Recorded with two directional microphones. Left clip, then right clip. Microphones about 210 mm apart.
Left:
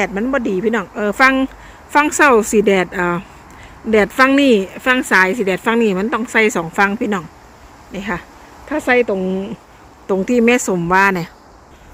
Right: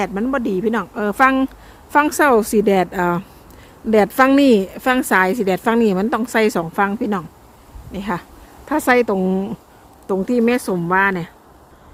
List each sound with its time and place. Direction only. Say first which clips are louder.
0.0 s a woman's voice: left 3 dB; 5° right (ahead or behind)
7.9 s a woman's voice: left 1 dB; 15° right (ahead or behind)
8.8 s speech: left 1 dB; 30° right (ahead or behind)
10.1 s speech: left 4 dB; centre (ahead or behind)